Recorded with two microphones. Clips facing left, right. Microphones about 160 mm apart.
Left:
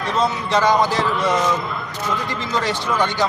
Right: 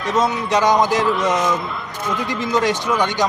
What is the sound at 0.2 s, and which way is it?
Speech, 15° right (ahead or behind).